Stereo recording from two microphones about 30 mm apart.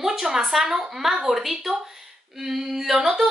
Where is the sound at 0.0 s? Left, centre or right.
Centre.